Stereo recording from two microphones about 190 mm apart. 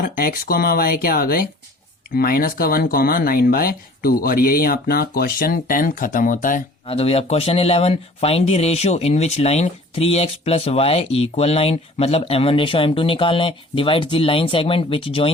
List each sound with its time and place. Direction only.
0.0 s speech: 50° left (ahead or behind)
6.8 s speech: 30° left (ahead or behind)